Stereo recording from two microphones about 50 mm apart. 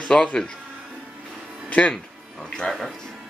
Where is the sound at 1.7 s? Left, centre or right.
Left.